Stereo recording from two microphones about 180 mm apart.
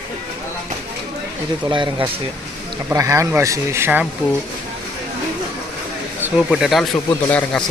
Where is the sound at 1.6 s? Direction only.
25° right (ahead or behind).